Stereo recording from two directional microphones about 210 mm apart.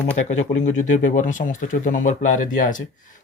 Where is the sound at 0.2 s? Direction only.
35° left (ahead or behind).